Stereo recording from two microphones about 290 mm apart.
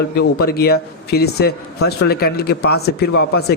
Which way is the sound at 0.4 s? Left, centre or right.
Left.